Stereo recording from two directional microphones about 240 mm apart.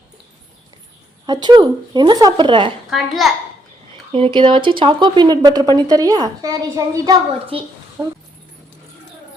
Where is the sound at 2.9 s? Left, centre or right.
Centre.